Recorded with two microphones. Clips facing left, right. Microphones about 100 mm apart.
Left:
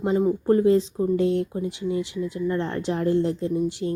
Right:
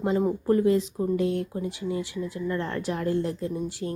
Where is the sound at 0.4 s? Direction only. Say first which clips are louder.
Left 3 dB; 30° left (ahead or behind).